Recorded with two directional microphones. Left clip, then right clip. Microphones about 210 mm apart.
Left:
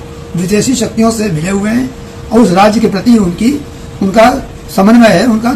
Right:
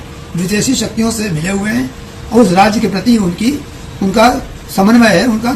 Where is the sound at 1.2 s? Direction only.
20° left (ahead or behind).